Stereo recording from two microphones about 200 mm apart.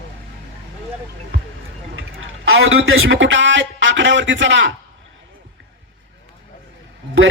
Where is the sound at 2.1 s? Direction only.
80° right.